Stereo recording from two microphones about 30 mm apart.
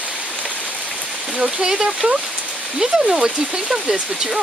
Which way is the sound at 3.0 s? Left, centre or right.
Right.